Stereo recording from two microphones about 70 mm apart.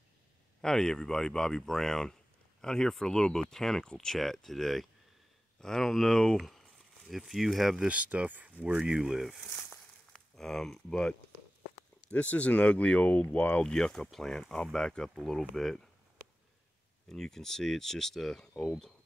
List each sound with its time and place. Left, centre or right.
0.6 s speech: centre
7.9 s speech: centre
9.5 s a sound: centre
10.3 s speech: centre
12.1 s speech: centre
17.1 s speech: centre